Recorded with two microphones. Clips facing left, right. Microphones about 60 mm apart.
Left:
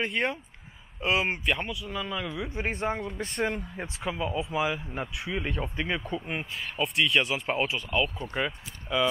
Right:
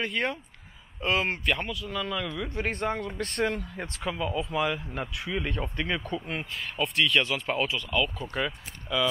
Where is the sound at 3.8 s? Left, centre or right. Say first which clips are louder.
Left 1 dB; centre.